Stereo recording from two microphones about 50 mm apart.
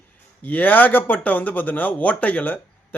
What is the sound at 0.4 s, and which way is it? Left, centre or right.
A man's voice, left.